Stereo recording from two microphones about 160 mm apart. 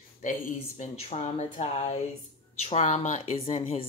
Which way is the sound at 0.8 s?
40° left (ahead or behind).